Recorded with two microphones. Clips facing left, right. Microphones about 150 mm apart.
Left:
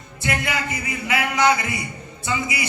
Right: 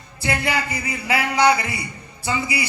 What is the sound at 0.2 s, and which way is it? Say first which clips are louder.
A man's voice: right 2 dB; 30° right (ahead or behind).